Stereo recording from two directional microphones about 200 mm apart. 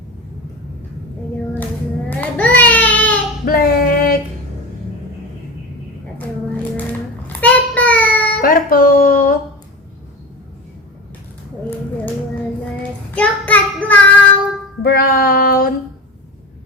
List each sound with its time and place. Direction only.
2.0 s a sound: 10° left (ahead or behind)
3.4 s child singing: 50° left (ahead or behind)
7.4 s child singing: 5° left (ahead or behind)
8.4 s music: 45° left (ahead or behind)
13.1 s child singing: 5° left (ahead or behind)
14.8 s female singing: 50° left (ahead or behind)